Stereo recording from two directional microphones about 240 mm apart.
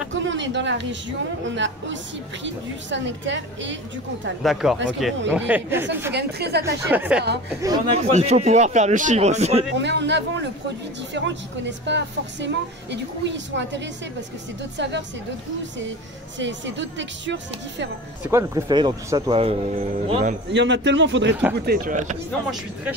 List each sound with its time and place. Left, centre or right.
0.1 s a sound: right
1.4 s a woman's voice: right
4.4 s speech: centre
6.1 s a woman's voice: right
6.6 s speech: centre
7.6 s speech: centre
8.0 s a man's voice: right
9.8 s a woman's voice: right
16.3 s a woman's voice: right
18.2 s a man's voice: centre
20.5 s a woman's voice: right
21.6 s speech: right